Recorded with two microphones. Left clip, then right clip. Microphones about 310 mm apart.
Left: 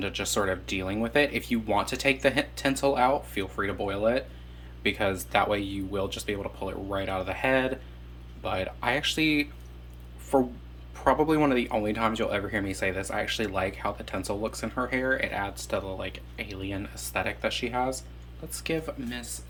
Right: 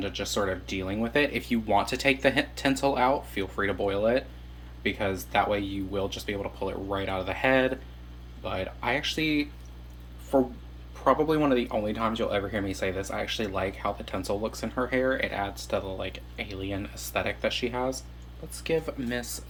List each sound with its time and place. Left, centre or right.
0.0 s speech: centre
19.0 s speech: centre